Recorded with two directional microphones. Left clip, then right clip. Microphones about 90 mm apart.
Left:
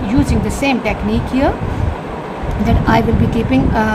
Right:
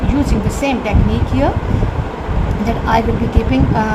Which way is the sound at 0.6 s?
30° left (ahead or behind).